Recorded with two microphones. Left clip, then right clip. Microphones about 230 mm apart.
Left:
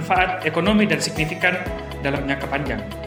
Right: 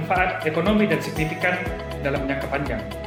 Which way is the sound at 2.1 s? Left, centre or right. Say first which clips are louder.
Left 1 dB; left.